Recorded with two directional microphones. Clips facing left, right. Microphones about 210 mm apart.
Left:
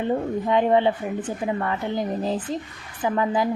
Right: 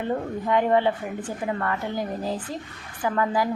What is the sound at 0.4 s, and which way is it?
A woman's voice, 20° left (ahead or behind).